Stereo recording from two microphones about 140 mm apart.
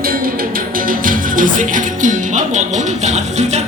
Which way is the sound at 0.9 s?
80° right.